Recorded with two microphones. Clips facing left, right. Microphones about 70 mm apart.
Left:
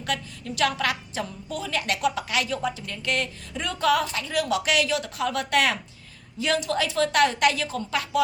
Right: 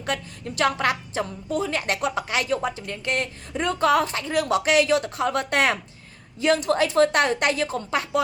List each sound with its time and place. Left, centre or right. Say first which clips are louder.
0.0 s a woman's voice: right 1 dB; right